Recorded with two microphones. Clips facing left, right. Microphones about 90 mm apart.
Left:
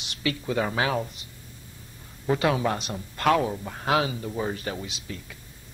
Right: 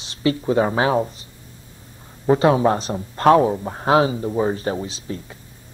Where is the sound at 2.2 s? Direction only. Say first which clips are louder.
Right 8 dB; 30° right (ahead or behind).